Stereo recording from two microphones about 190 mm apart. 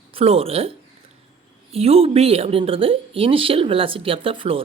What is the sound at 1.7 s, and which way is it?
Speech, 30° right (ahead or behind).